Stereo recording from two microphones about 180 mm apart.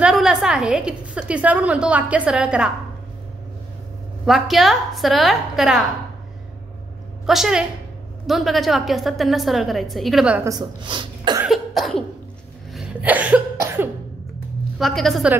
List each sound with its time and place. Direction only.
0.0 s a woman's voice: 5° right (ahead or behind)
4.3 s a woman's voice: centre (ahead or behind)
7.2 s a woman's voice: 5° right (ahead or behind)
10.6 s speech: 25° right (ahead or behind)
11.4 s cough: centre (ahead or behind)
14.8 s a woman's voice: centre (ahead or behind)